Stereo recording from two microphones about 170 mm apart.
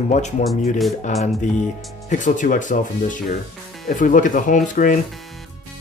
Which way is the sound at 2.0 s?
45° left (ahead or behind).